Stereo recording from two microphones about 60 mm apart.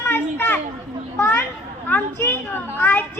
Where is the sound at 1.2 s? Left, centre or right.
Left.